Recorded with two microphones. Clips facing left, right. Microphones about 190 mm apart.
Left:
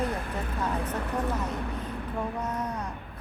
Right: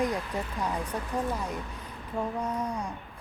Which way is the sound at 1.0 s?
65° left (ahead or behind).